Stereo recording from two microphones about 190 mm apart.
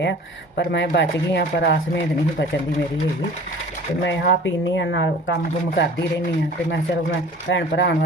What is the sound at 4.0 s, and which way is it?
Speech, 75° left (ahead or behind).